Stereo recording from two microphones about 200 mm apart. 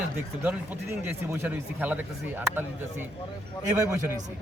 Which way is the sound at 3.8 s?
15° right (ahead or behind).